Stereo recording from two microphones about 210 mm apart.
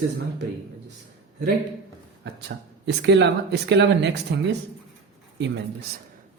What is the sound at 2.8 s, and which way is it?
Speech, 55° right (ahead or behind).